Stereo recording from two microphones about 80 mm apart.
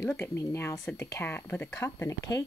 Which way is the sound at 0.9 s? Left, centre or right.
Left.